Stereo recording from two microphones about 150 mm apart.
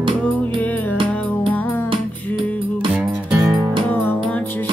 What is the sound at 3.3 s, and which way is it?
Music, 25° right (ahead or behind).